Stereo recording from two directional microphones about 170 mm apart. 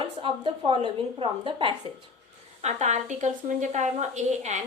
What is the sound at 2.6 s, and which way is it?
A woman's voice, 40° right (ahead or behind).